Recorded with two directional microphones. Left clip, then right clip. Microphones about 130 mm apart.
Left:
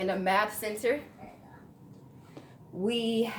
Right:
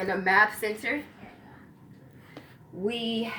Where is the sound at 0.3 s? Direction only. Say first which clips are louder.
Right 7 dB; 35° left (ahead or behind).